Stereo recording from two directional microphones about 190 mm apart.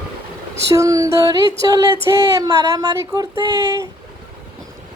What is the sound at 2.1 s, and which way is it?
Female singing, 20° right (ahead or behind).